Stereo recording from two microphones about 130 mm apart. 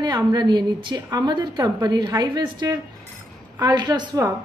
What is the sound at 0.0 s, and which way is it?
A woman's voice, 30° right (ahead or behind).